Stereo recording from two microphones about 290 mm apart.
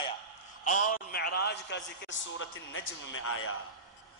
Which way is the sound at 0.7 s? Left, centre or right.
Left.